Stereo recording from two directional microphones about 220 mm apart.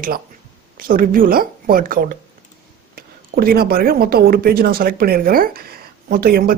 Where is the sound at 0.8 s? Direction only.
40° right (ahead or behind).